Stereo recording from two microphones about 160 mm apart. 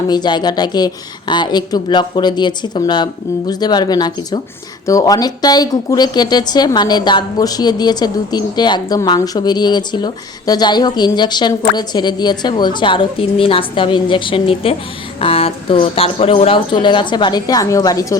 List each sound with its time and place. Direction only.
0.1 s speech: 25° left (ahead or behind)